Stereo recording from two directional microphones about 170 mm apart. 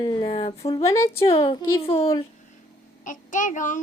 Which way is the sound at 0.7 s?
15° left (ahead or behind).